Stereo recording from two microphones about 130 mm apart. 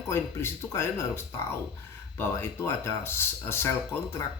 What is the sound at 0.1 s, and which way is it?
Speech, 20° left (ahead or behind).